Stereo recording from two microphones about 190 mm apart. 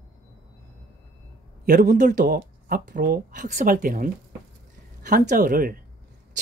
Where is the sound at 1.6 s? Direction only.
45° right (ahead or behind).